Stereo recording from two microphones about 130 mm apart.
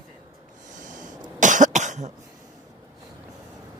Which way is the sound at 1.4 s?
75° right (ahead or behind).